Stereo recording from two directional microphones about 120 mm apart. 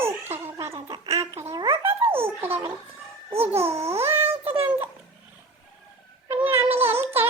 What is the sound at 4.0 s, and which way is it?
Cat, 20° right (ahead or behind).